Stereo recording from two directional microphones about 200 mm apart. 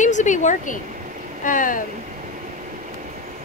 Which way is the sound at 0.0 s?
40° left (ahead or behind).